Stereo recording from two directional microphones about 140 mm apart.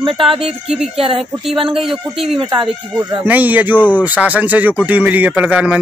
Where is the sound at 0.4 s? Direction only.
5° right (ahead or behind).